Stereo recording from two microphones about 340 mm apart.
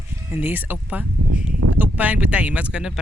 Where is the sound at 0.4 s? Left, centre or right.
Centre.